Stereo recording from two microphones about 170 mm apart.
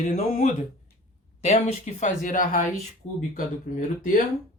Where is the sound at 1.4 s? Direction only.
40° left (ahead or behind).